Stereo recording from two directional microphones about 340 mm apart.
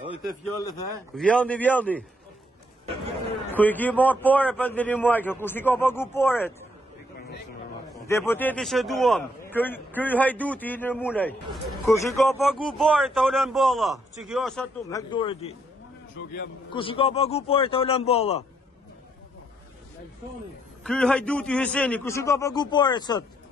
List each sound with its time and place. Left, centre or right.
1.1 s speech: centre
3.5 s speech: centre
8.1 s speech: centre
16.7 s a man's voice: centre
20.8 s a man's voice: centre